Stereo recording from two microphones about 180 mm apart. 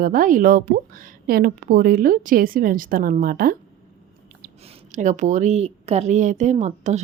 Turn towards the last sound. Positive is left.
turn(degrees=-40)  # may be behind; listen again after turning